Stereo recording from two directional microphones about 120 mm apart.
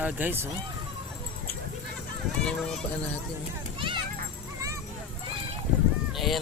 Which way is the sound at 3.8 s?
45° right (ahead or behind).